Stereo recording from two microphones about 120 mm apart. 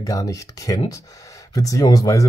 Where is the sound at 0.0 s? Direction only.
30° left (ahead or behind).